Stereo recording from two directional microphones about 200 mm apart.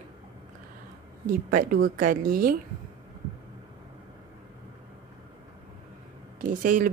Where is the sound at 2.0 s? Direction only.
45° right (ahead or behind).